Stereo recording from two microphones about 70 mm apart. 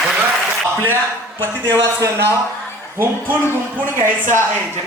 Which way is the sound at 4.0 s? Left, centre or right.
Right.